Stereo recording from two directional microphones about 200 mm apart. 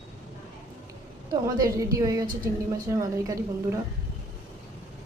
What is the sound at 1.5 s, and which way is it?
A woman's voice, 15° right (ahead or behind).